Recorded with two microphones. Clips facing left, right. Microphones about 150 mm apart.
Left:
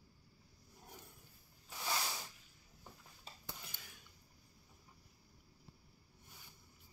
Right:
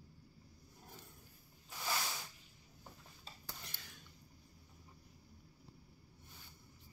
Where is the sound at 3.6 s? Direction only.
5° left (ahead or behind).